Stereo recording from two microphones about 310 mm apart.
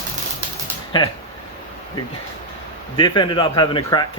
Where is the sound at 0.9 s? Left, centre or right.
Centre.